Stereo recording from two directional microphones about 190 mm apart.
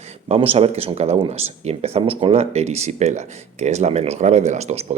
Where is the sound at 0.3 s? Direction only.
30° right (ahead or behind).